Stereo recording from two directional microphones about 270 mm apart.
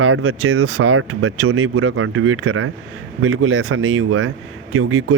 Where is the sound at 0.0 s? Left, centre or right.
Right.